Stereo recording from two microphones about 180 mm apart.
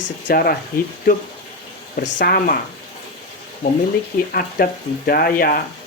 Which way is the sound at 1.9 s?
55° left (ahead or behind).